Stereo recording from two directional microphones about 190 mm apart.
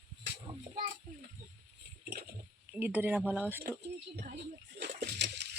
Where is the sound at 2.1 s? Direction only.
55° right (ahead or behind).